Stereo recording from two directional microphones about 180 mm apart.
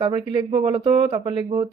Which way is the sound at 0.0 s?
25° right (ahead or behind).